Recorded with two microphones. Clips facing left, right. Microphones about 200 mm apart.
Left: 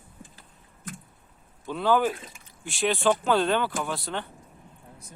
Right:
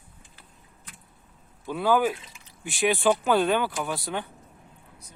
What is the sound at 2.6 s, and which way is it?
Speech, 5° right (ahead or behind).